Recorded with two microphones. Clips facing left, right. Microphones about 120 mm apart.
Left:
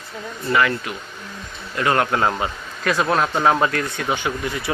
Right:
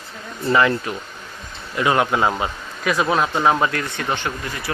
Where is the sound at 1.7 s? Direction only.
15° right (ahead or behind).